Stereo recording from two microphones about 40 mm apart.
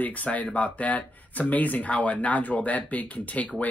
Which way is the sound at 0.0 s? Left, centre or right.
Left.